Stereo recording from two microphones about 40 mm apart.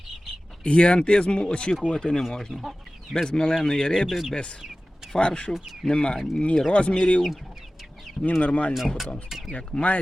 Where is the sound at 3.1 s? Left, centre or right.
Centre.